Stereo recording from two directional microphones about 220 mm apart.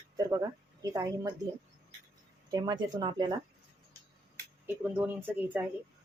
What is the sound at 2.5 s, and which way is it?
Speech, 20° right (ahead or behind).